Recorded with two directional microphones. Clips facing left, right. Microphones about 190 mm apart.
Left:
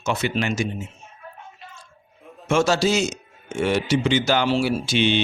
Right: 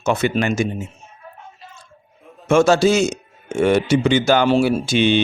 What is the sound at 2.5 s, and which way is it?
Speech, 55° right (ahead or behind).